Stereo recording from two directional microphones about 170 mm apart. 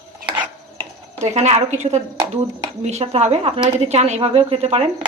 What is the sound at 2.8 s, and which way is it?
A woman's voice, 40° right (ahead or behind).